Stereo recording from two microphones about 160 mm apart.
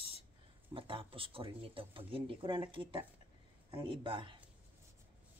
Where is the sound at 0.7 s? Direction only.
35° right (ahead or behind).